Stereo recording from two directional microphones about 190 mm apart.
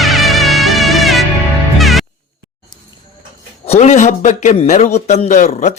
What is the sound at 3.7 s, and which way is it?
A man's voice, 40° left (ahead or behind).